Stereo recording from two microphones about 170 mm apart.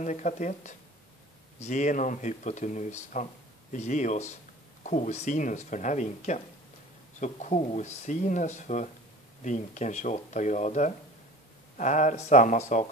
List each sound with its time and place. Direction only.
0.0 s speech: 45° left (ahead or behind)